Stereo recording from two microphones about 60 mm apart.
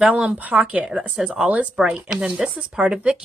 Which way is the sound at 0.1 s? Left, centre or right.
Right.